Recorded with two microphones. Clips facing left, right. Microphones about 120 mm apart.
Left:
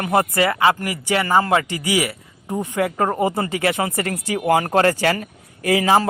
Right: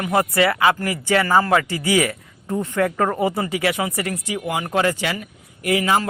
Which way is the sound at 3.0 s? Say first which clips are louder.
Left 1 dB; 30° left (ahead or behind).